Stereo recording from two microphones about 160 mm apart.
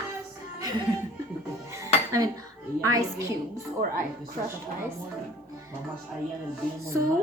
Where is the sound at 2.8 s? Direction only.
20° right (ahead or behind).